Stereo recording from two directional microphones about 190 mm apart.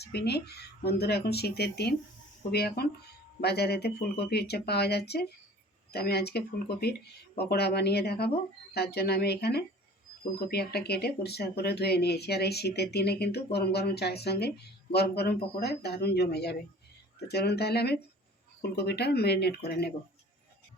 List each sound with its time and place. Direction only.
0.0 s speech: 60° left (ahead or behind)